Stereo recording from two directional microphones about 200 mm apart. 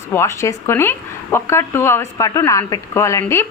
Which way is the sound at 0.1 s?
15° left (ahead or behind).